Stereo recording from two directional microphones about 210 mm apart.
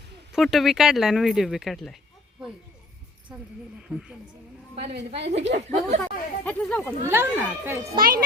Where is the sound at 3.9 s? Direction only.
5° right (ahead or behind).